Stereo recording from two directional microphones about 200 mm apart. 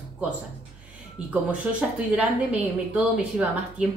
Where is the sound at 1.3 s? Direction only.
5° right (ahead or behind).